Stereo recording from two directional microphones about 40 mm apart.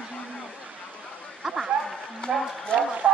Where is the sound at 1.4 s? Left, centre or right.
Centre.